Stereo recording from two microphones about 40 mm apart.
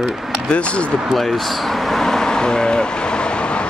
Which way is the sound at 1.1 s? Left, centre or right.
Centre.